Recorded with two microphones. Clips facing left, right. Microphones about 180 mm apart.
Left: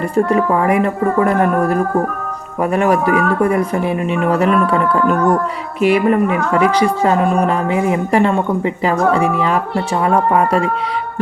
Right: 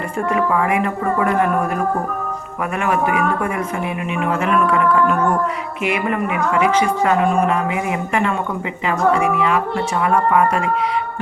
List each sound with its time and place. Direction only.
0.3 s speech: 35° left (ahead or behind)